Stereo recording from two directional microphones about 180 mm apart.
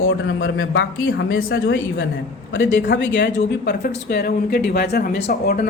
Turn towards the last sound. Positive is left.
turn(degrees=65)  # may be behind; listen again after turning